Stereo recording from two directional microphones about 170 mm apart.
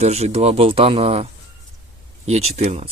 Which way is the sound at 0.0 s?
40° right (ahead or behind).